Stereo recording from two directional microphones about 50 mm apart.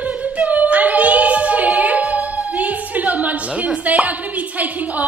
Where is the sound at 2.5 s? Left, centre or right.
Right.